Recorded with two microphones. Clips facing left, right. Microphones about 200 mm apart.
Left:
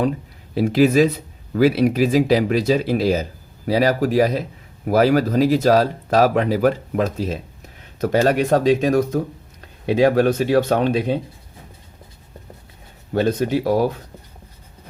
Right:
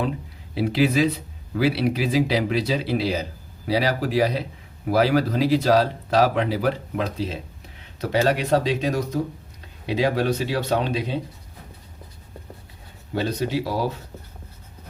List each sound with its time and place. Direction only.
0.5 s speech: 45° left (ahead or behind)
13.1 s speech: 50° left (ahead or behind)